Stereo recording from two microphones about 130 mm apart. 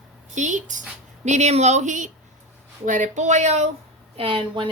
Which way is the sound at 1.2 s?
60° right (ahead or behind).